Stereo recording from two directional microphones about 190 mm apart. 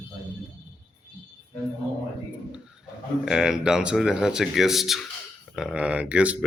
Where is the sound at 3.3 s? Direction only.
Centre (ahead or behind).